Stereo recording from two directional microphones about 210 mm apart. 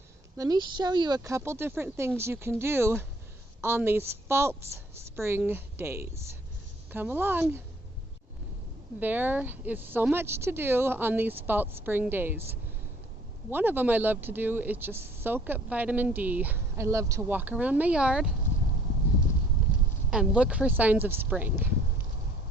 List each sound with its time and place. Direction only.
0.3 s speech: 20° right (ahead or behind)
9.0 s speech: 10° right (ahead or behind)
20.1 s speech: 5° right (ahead or behind)